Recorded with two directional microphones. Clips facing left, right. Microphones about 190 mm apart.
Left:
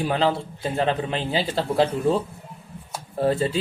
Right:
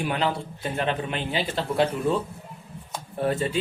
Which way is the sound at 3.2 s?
30° left (ahead or behind).